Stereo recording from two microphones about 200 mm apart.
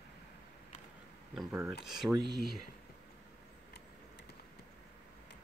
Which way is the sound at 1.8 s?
Centre (ahead or behind).